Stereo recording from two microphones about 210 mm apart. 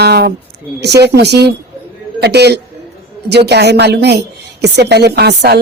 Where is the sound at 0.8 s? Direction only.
50° right (ahead or behind).